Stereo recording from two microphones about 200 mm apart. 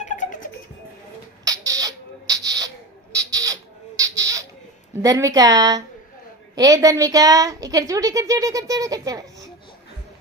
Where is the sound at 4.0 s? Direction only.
15° right (ahead or behind).